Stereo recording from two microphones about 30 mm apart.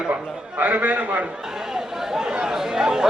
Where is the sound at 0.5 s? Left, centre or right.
Right.